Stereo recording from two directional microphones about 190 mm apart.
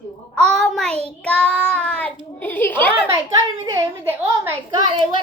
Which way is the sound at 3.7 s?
15° right (ahead or behind).